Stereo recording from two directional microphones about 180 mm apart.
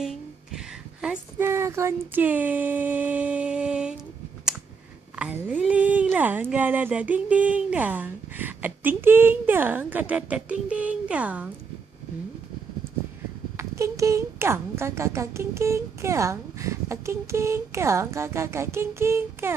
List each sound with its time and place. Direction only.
0.0 s speech: centre (ahead or behind)
5.1 s speech: 10° right (ahead or behind)
13.6 s speech: 15° right (ahead or behind)